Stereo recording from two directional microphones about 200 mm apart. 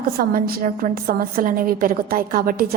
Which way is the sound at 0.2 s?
45° right (ahead or behind).